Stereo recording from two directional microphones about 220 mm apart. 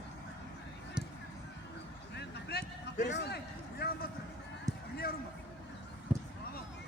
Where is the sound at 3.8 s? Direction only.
45° left (ahead or behind).